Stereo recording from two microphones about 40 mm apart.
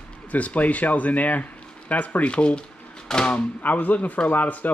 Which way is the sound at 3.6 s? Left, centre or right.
Left.